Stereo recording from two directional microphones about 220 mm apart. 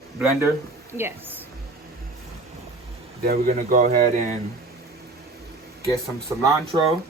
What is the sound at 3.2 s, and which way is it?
Speech, 40° right (ahead or behind).